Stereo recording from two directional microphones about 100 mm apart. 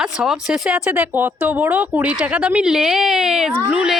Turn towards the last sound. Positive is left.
turn(degrees=-10)  # may be behind; listen again after turning